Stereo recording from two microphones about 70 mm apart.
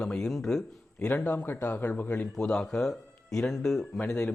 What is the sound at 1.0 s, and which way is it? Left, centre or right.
Speech, left.